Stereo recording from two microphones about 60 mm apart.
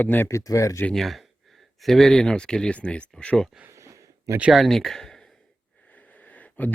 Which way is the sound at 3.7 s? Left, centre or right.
Right.